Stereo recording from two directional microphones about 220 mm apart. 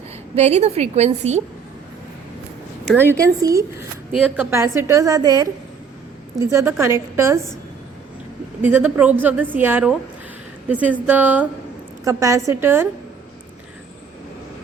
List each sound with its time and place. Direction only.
0.3 s a woman's voice: 30° right (ahead or behind)
3.1 s a woman's voice: 15° right (ahead or behind)
8.6 s a woman's voice: 5° right (ahead or behind)